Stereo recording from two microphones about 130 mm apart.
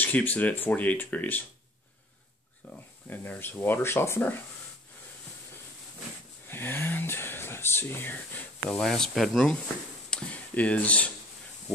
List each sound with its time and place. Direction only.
0.0 s speech: 15° left (ahead or behind)
2.6 s speech: 10° left (ahead or behind)
6.4 s speech: 15° left (ahead or behind)